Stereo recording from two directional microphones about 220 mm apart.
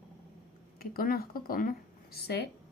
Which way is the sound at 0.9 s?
40° left (ahead or behind).